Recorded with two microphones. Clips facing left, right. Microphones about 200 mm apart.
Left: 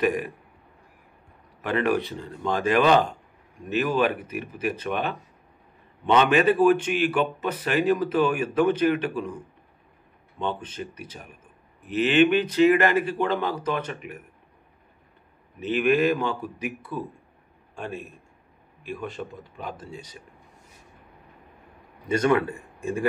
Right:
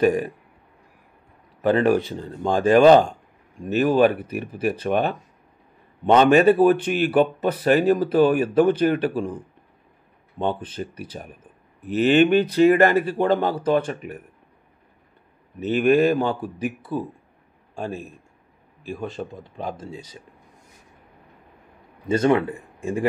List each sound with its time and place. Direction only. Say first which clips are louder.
0.0 s speech: right 5 dB; 30° right (ahead or behind)
1.6 s speech: right 6 dB; 35° right (ahead or behind)
10.6 s speech: right 4 dB; 35° right (ahead or behind)
15.6 s a man's voice: right 4 dB; 40° right (ahead or behind); by 20.2 s 25° right (ahead or behind)
22.0 s speech: right 3 dB; 25° right (ahead or behind)